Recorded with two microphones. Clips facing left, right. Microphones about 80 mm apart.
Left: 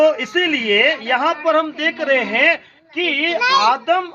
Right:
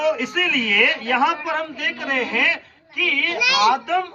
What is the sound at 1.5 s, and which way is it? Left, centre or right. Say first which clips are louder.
A woman's voice: left 8 dB; left.